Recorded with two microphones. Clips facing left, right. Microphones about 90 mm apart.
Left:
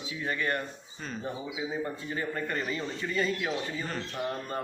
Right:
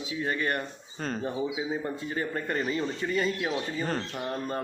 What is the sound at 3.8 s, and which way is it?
Speech, 45° right (ahead or behind).